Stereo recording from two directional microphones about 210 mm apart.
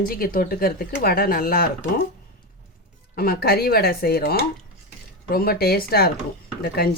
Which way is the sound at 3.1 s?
45° left (ahead or behind).